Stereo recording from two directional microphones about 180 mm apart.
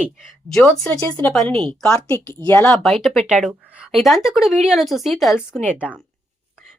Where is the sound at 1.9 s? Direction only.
15° left (ahead or behind).